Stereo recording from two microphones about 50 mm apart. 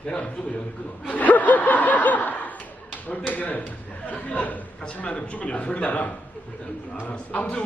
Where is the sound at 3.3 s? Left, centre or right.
Left.